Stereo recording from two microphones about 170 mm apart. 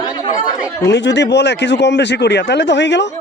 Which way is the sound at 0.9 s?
90° left.